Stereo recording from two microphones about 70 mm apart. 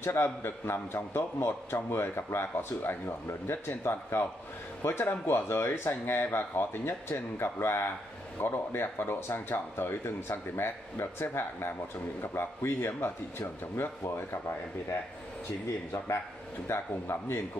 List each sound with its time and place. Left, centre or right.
0.0 s a man's voice: left
16.6 s a man's voice: left